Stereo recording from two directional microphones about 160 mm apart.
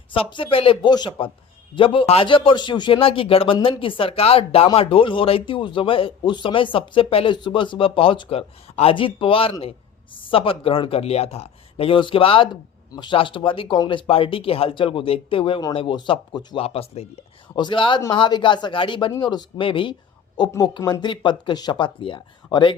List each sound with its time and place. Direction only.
0.1 s a man's voice: 30° left (ahead or behind)
16.6 s a man's voice: 40° left (ahead or behind)
17.5 s speech: 30° left (ahead or behind)